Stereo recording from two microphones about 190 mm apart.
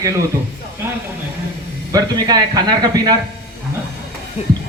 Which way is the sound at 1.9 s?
20° right (ahead or behind).